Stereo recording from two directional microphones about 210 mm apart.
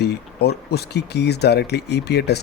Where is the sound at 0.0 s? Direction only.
50° left (ahead or behind).